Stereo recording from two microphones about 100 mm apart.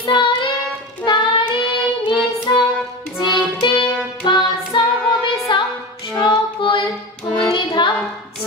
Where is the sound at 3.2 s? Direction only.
50° left (ahead or behind).